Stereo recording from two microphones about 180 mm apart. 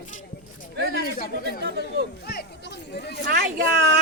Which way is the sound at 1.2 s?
60° left (ahead or behind).